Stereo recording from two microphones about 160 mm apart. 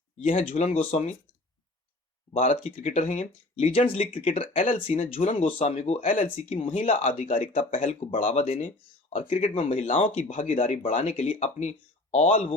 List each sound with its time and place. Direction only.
0.2 s speech: 55° left (ahead or behind)
0.4 s speech: 40° left (ahead or behind)
2.3 s speech: 45° left (ahead or behind)
4.6 s speech: 50° left (ahead or behind)
8.1 s speech: 50° left (ahead or behind)
9.3 s speech: 35° left (ahead or behind)